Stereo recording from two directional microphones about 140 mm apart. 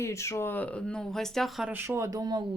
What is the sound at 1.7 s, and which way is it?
Speech, 15° right (ahead or behind).